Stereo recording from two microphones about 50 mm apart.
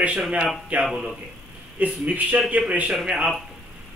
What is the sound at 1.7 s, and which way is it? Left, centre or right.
A man's voice, right.